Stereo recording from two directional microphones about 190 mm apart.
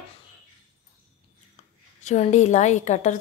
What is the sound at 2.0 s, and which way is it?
A woman's voice, 40° left (ahead or behind).